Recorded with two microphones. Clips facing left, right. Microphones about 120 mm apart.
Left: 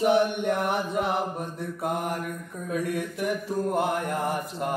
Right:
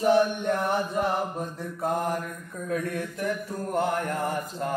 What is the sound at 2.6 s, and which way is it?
Mantra, 15° left (ahead or behind).